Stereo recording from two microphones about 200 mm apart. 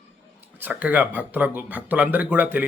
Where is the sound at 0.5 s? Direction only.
10° right (ahead or behind).